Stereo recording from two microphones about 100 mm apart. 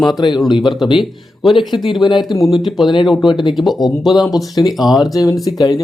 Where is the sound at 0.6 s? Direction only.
Centre (ahead or behind).